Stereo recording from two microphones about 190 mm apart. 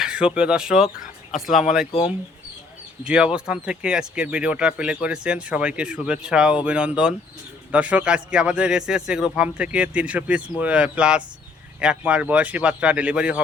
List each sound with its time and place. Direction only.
0.0 s speech: 5° right (ahead or behind)
1.9 s speech: 30° left (ahead or behind)
3.0 s speech: 5° right (ahead or behind)